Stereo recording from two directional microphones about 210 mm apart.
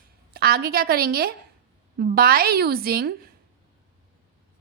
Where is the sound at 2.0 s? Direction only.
45° right (ahead or behind).